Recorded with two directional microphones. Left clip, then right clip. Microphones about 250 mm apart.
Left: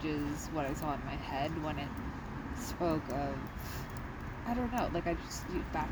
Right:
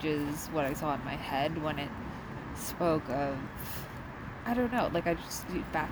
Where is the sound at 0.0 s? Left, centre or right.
Right.